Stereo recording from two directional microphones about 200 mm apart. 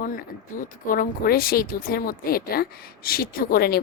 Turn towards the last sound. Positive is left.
turn(degrees=50)  # may be behind; listen again after turning